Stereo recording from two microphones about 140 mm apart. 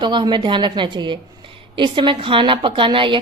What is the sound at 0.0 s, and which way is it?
A woman's voice, 35° right (ahead or behind).